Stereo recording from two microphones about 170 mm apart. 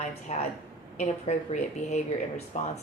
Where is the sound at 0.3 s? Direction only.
35° left (ahead or behind).